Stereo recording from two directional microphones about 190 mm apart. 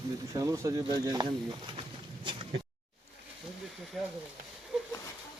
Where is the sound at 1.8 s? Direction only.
25° right (ahead or behind).